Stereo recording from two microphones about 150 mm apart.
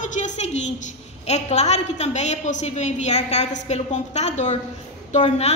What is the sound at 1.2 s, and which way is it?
A woman's voice, 50° left (ahead or behind).